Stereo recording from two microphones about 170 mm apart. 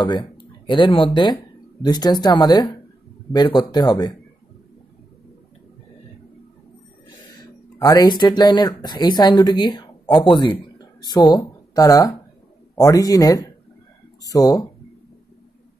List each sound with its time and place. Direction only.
0.0 s speech: 30° left (ahead or behind)
7.1 s speech: 20° left (ahead or behind)